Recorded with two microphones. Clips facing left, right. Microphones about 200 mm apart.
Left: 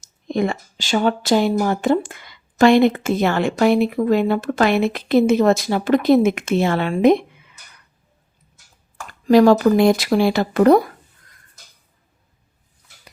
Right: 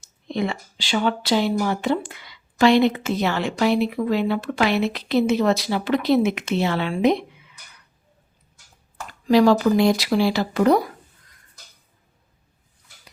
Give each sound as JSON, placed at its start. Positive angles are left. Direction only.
{"t": 0.0, "sound": "speech", "side_deg": 45}
{"t": 9.0, "sound": "speech", "side_deg": 50}